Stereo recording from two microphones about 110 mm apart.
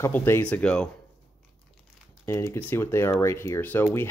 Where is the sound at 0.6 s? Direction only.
10° left (ahead or behind).